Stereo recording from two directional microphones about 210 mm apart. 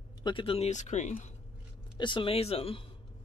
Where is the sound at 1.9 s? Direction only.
25° left (ahead or behind).